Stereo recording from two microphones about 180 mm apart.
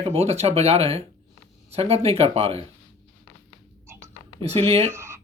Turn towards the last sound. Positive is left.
turn(degrees=-15)  # may be behind; listen again after turning